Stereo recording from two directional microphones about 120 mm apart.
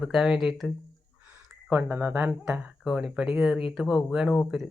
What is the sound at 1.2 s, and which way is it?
Speech, 15° right (ahead or behind).